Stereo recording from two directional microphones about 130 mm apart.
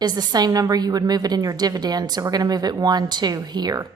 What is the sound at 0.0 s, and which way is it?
A woman's voice, 30° right (ahead or behind).